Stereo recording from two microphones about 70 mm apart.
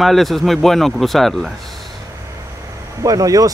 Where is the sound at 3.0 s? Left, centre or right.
Right.